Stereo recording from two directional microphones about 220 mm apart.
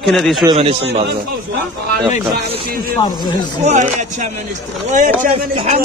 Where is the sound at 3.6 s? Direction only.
30° right (ahead or behind).